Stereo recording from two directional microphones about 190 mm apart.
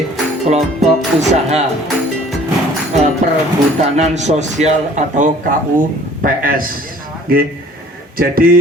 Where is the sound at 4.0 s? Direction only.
35° right (ahead or behind).